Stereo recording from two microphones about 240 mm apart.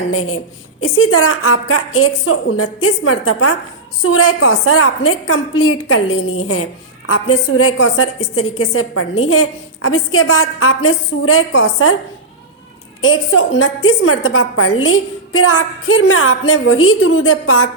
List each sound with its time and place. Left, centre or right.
0.1 s a woman's voice: left
13.0 s a woman's voice: left